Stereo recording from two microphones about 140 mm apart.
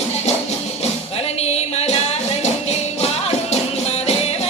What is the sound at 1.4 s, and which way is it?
Music, 50° left (ahead or behind).